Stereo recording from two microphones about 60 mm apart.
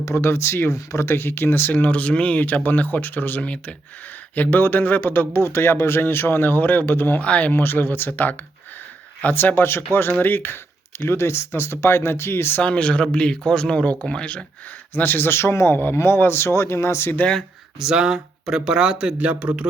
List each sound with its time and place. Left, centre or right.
0.2 s speech: left
1.7 s speech: left
4.4 s speech: left
7.2 s speech: left
7.5 s speech: left
10.1 s speech: left
12.5 s speech: centre
14.9 s speech: left
17.7 s speech: centre